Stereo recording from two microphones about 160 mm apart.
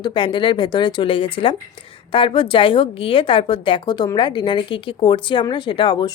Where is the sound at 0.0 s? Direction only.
30° left (ahead or behind).